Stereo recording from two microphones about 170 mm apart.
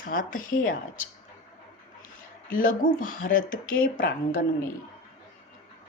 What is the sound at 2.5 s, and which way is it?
A woman's voice, 55° left (ahead or behind).